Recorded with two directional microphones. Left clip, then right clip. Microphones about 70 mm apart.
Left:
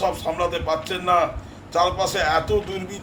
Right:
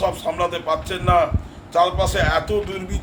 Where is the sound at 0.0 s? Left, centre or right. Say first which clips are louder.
Right 1 dB; right.